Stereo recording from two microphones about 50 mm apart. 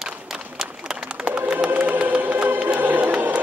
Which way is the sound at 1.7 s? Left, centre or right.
Right.